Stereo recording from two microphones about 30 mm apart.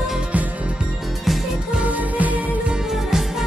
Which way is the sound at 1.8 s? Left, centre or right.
Right.